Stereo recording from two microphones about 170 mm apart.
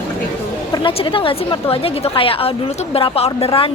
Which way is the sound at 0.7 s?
30° left (ahead or behind).